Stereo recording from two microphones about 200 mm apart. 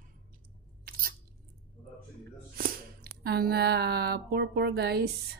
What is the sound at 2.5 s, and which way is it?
Speech, 50° right (ahead or behind).